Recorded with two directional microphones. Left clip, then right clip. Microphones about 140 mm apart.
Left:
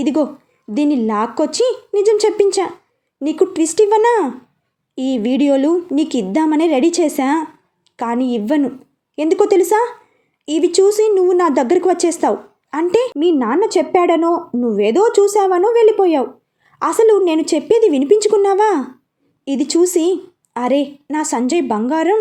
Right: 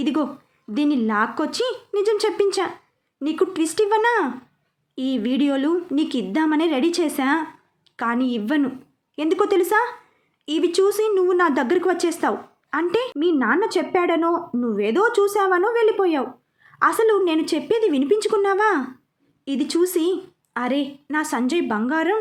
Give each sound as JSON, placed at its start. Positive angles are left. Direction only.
{"t": 0.0, "sound": "a woman's voice", "side_deg": 15}